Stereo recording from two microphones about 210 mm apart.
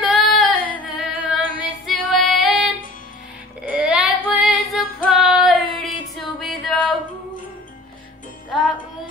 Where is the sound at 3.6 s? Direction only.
5° right (ahead or behind).